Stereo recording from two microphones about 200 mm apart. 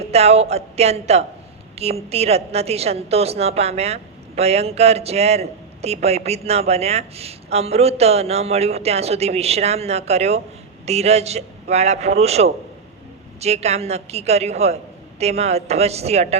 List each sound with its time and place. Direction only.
0.0 s a woman's voice: 30° right (ahead or behind)